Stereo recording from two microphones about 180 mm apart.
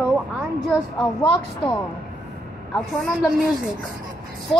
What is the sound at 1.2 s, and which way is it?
Speech, 10° left (ahead or behind).